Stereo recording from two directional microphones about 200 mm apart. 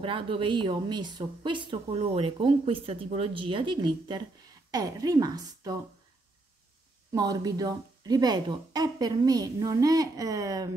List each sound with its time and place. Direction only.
0.0 s speech: 25° right (ahead or behind)
7.2 s speech: 20° right (ahead or behind)